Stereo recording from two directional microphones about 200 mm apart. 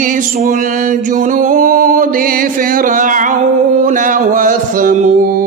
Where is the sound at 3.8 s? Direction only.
40° right (ahead or behind).